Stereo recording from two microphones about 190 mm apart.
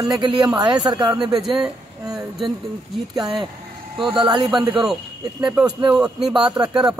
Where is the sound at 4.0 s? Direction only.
25° right (ahead or behind).